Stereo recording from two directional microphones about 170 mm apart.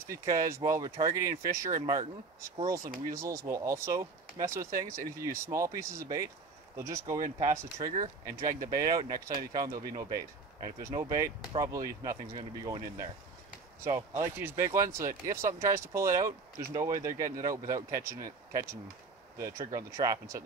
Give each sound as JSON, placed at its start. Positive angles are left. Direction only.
{"t": 0.1, "sound": "speech", "side_deg": -20}
{"t": 1.8, "sound": "speech", "side_deg": -35}
{"t": 2.5, "sound": "speech", "side_deg": -20}